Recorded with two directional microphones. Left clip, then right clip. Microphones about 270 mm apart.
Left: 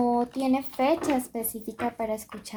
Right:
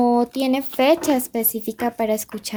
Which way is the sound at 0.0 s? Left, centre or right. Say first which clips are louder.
Right 7 dB; right.